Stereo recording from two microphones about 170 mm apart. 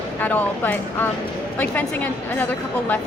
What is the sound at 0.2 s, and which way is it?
A woman's voice, 10° left (ahead or behind).